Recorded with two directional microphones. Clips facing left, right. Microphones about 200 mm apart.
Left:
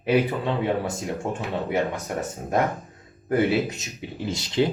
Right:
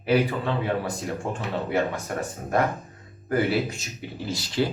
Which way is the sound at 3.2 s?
20° left (ahead or behind).